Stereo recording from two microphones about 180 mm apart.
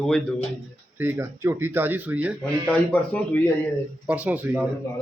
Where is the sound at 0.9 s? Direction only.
10° right (ahead or behind).